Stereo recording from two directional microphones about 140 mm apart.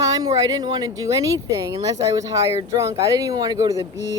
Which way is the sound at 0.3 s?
25° right (ahead or behind).